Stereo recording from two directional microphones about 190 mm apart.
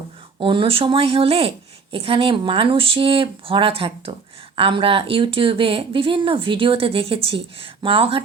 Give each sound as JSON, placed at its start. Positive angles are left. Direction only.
{"t": 0.3, "sound": "a woman's voice", "side_deg": -25}